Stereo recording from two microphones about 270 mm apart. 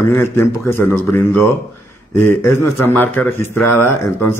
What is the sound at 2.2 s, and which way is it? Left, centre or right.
Speech, left.